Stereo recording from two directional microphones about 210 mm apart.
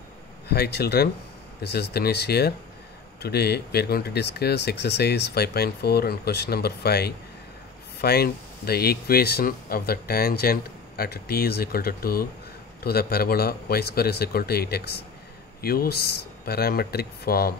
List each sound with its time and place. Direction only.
0.5 s speech: 50° left (ahead or behind)